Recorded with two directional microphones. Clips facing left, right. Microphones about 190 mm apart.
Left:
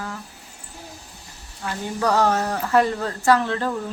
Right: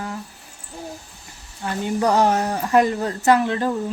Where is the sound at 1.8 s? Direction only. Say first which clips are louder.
Right 2 dB; 20° right (ahead or behind).